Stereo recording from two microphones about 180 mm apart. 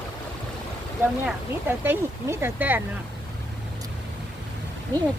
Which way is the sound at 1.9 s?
15° right (ahead or behind).